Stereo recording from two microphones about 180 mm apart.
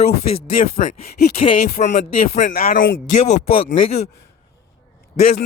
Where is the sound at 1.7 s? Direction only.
40° left (ahead or behind).